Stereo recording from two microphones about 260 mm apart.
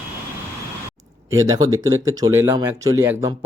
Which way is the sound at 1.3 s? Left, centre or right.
Centre.